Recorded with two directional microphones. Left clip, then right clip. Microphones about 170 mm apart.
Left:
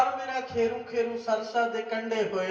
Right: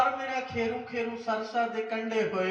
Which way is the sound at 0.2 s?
20° left (ahead or behind).